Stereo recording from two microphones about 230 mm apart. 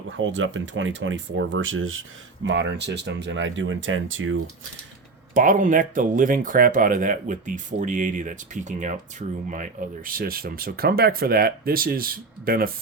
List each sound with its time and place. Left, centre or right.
0.2 s speech: right
5.3 s speech: right